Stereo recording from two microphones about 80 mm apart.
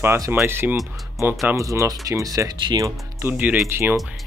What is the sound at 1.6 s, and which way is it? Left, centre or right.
Speech, right.